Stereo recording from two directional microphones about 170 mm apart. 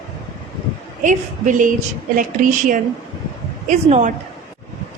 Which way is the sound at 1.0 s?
50° right (ahead or behind).